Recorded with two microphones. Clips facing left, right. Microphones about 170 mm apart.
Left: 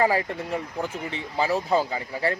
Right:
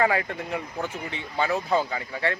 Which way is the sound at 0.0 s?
30° left (ahead or behind).